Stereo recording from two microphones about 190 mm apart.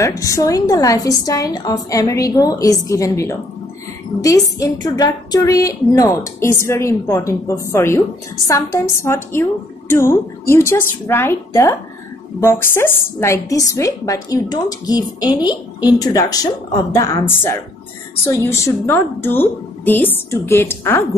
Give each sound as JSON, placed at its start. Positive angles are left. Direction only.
{"t": 0.0, "sound": "a woman's voice", "side_deg": 15}